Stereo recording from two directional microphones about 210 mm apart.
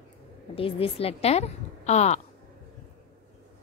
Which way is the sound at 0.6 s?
25° left (ahead or behind).